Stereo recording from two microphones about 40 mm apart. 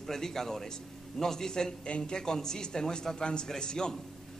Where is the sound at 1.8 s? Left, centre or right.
Left.